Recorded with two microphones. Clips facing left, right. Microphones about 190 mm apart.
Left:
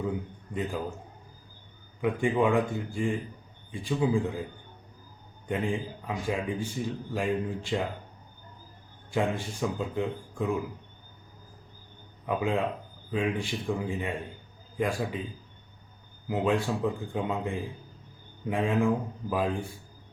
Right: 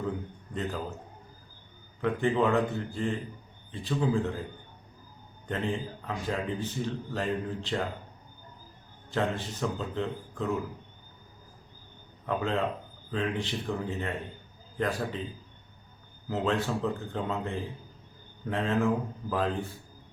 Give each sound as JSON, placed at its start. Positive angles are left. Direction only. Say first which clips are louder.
{"t": 0.5, "sound": "speech", "louder": "left 2 dB", "side_deg": 10}
{"t": 2.0, "sound": "speech", "louder": "left 1 dB", "side_deg": 10}
{"t": 5.5, "sound": "speech", "louder": "left 2 dB", "side_deg": 10}
{"t": 9.0, "sound": "speech", "louder": "left 1 dB", "side_deg": 10}
{"t": 12.2, "sound": "speech", "louder": "left 1 dB", "side_deg": 10}
{"t": 16.3, "sound": "speech", "louder": "left 2 dB", "side_deg": 10}